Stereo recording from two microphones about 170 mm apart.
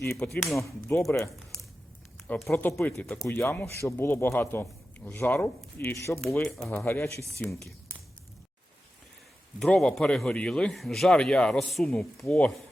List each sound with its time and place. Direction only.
0.0 s speech: 15° left (ahead or behind)
0.3 s a man's voice: centre (ahead or behind)
0.9 s speech: 10° left (ahead or behind)
2.2 s speech: 10° left (ahead or behind)
9.6 s a man's voice: 5° left (ahead or behind)